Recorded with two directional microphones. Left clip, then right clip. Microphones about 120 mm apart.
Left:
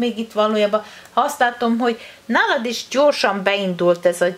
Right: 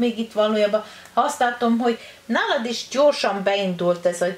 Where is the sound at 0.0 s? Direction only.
25° left (ahead or behind).